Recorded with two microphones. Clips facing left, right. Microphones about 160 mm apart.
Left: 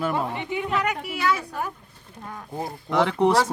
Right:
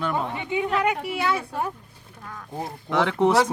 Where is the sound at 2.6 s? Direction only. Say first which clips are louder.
Left 1 dB; centre (ahead or behind).